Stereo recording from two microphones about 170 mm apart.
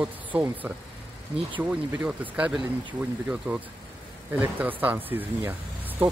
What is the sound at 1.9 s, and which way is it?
Speech, 10° right (ahead or behind).